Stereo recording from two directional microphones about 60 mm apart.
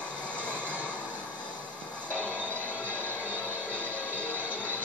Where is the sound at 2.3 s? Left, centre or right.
Right.